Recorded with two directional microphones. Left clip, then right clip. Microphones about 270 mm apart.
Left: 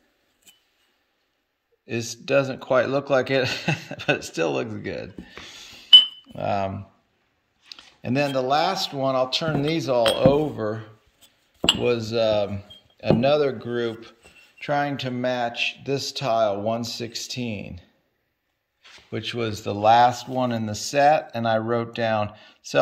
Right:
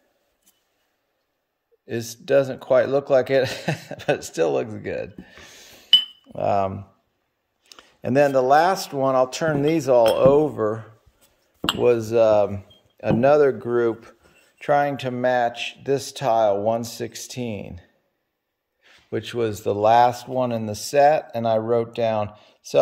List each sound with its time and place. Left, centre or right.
1.9 s speech: centre
7.7 s speech: centre
19.0 s speech: centre